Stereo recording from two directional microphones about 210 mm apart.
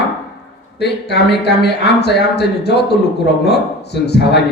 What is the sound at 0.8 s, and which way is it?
A man's voice, 50° left (ahead or behind).